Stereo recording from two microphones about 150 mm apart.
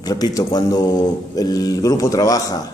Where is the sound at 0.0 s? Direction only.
25° left (ahead or behind).